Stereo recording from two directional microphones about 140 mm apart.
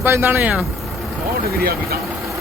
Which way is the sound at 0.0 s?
15° right (ahead or behind).